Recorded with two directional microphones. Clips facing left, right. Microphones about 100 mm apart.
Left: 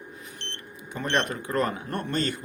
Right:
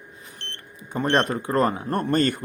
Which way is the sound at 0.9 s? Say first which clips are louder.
Right 5 dB; 40° right (ahead or behind).